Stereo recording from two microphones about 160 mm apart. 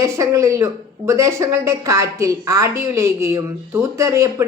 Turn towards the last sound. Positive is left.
turn(degrees=-20)  # may be behind; listen again after turning